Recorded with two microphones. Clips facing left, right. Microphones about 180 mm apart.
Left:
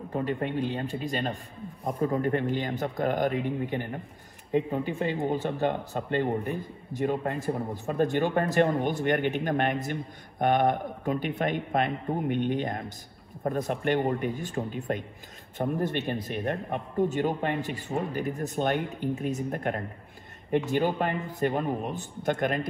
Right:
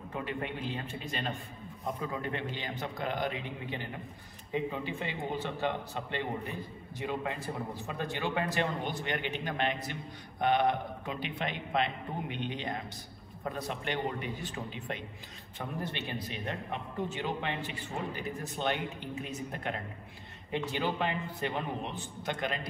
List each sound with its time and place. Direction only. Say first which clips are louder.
0.1 s a man's voice: left 8 dB; 35° left (ahead or behind)
16.3 s speech: left 8 dB; 55° left (ahead or behind)
16.7 s a man's voice: left 11 dB; 40° left (ahead or behind)